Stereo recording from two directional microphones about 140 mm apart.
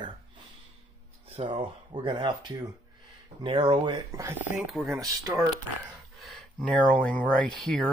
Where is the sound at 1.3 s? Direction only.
35° right (ahead or behind); by 4.5 s 20° right (ahead or behind).